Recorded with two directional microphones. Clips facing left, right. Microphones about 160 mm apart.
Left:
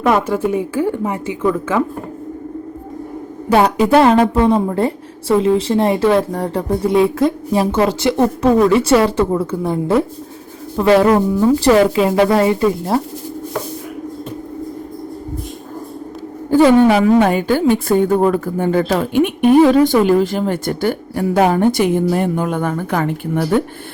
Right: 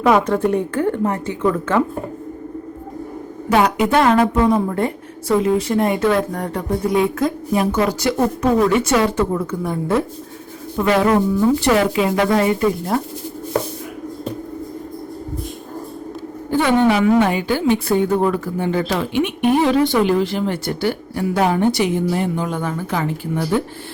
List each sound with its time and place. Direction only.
0.0 s a woman's voice: centre (ahead or behind)
3.5 s speech: 30° left (ahead or behind)
16.5 s a woman's voice: 40° left (ahead or behind)